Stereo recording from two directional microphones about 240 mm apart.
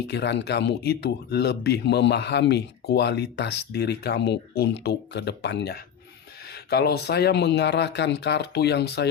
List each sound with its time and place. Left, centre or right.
0.1 s speech: left